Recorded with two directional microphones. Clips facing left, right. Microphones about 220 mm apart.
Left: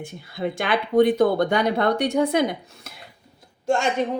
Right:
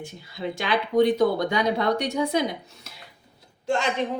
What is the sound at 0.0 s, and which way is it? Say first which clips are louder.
Speech: left 4 dB; 55° left (ahead or behind).